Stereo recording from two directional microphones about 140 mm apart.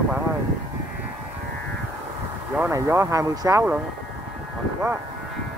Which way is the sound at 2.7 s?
20° right (ahead or behind).